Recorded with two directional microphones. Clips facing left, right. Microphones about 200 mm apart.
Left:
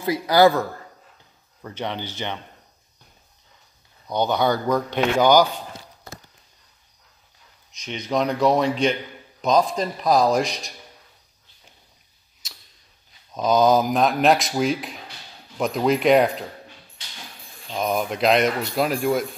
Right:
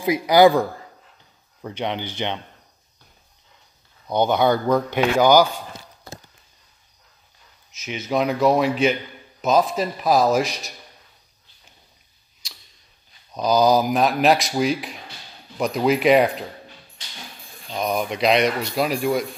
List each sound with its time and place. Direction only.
0.0 s speech: 15° right (ahead or behind)
4.6 s speech: 10° right (ahead or behind)
7.7 s speech: 5° right (ahead or behind)
13.3 s speech: centre (ahead or behind)
17.7 s speech: centre (ahead or behind)